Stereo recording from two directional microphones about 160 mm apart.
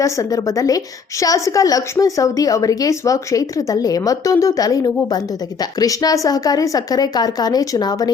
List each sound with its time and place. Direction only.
0.0 s a woman's voice: 20° left (ahead or behind)